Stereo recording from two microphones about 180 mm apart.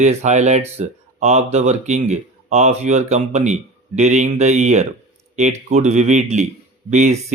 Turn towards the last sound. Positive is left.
turn(degrees=-40)  # may be behind; listen again after turning